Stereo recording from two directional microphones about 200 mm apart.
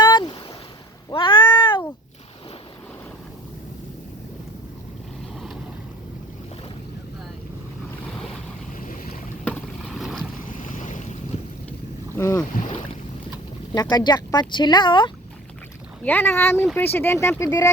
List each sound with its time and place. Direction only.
0.0 s boat: 20° left (ahead or behind)
1.1 s cat: 25° left (ahead or behind)
8.8 s boat: 45° left (ahead or behind)
9.4 s boat: 5° left (ahead or behind)
10.5 s boat: 40° left (ahead or behind)
12.1 s boat: 15° left (ahead or behind)
13.7 s speech: 20° left (ahead or behind)
16.0 s speech: 10° left (ahead or behind)